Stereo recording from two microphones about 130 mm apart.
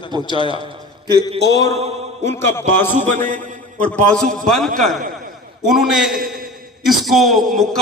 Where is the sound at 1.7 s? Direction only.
55° right (ahead or behind).